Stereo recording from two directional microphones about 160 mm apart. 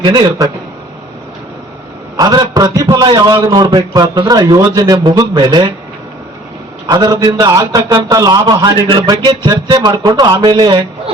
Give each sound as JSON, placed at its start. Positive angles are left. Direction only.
{"t": 0.0, "sound": "a man's voice", "side_deg": -30}
{"t": 2.1, "sound": "a man's voice", "side_deg": -25}
{"t": 6.9, "sound": "a man's voice", "side_deg": -25}